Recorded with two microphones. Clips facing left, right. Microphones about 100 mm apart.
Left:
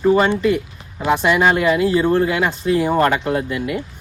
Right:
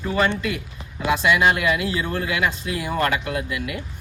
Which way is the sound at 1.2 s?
35° left (ahead or behind).